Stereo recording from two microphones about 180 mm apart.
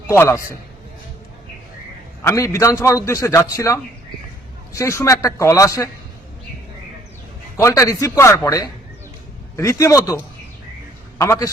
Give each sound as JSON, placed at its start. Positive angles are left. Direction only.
{"t": 0.1, "sound": "a man's voice", "side_deg": 15}
{"t": 2.2, "sound": "a man's voice", "side_deg": 15}
{"t": 7.5, "sound": "a man's voice", "side_deg": 15}